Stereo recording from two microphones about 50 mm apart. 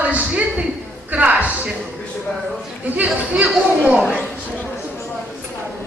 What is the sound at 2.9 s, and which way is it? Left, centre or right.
Speech, right.